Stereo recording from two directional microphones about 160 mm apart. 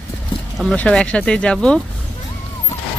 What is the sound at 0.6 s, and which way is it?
Speech, 5° left (ahead or behind).